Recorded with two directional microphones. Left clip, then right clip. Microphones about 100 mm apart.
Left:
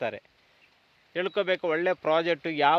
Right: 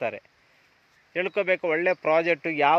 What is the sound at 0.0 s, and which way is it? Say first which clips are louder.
Speech: right 2 dB; 20° left (ahead or behind).